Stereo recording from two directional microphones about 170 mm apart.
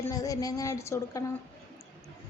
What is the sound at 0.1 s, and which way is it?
Speech, 20° left (ahead or behind).